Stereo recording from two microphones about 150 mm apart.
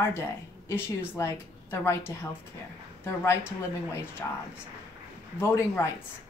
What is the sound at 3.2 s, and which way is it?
Speech, 15° left (ahead or behind).